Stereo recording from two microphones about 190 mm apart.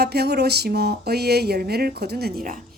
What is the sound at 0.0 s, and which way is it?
A woman's voice, 55° right (ahead or behind).